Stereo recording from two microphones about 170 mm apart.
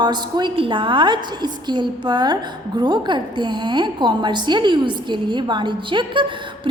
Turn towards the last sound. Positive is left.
turn(degrees=-30)  # may be behind; listen again after turning